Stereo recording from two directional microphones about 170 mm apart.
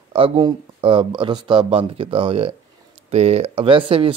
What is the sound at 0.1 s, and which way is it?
Speech, 30° right (ahead or behind).